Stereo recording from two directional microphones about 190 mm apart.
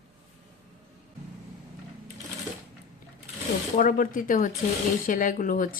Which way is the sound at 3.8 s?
45° left (ahead or behind).